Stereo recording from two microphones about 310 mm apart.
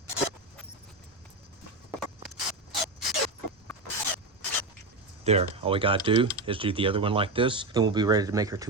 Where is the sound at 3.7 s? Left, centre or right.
Centre.